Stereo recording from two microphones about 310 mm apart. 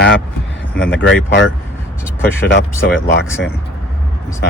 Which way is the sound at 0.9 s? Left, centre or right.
Left.